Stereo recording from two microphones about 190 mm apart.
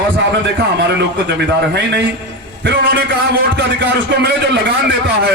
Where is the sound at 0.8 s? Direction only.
60° right (ahead or behind).